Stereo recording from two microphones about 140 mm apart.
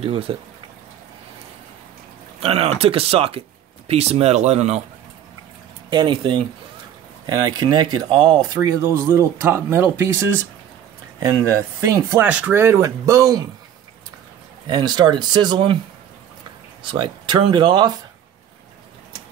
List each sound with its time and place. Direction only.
0.0 s speech: 45° right (ahead or behind)
2.4 s speech: 45° right (ahead or behind)
5.9 s speech: 35° right (ahead or behind)
8.5 s speech: 25° right (ahead or behind)
12.3 s speech: 10° right (ahead or behind)
14.7 s speech: 30° right (ahead or behind)
16.9 s speech: 35° right (ahead or behind)